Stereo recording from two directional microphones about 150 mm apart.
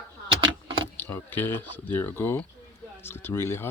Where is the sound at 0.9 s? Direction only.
15° left (ahead or behind).